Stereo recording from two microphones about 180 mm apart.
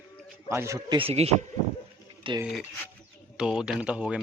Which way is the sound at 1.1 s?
35° right (ahead or behind).